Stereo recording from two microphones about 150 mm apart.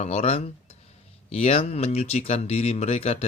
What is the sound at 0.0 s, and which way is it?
Speech, 45° left (ahead or behind).